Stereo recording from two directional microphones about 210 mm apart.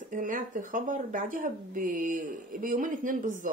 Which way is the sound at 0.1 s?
40° right (ahead or behind).